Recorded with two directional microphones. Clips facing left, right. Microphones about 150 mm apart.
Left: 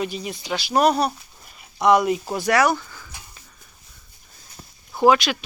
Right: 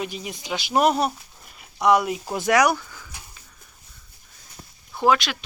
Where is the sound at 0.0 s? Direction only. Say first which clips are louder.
Left 3 dB; 10° right (ahead or behind).